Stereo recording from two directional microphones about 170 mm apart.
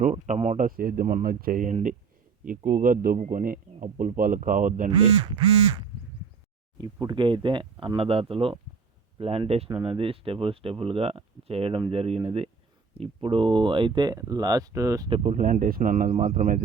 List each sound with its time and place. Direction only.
0.0 s speech: 45° right (ahead or behind)
4.9 s speech: 25° right (ahead or behind)
15.1 s speech: 45° right (ahead or behind)